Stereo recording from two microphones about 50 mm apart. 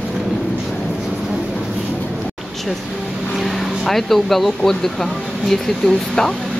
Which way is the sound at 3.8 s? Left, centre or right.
Centre.